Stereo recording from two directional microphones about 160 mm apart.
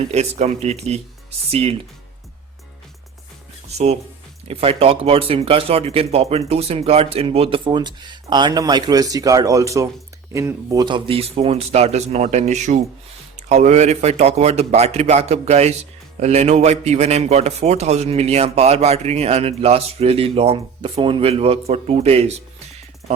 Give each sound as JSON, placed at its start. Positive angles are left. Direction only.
{"t": 0.1, "sound": "a man's voice", "side_deg": -45}
{"t": 4.4, "sound": "a man's voice", "side_deg": -40}